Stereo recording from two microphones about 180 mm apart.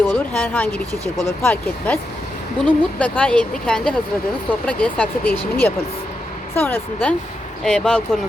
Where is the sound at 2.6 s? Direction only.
5° left (ahead or behind).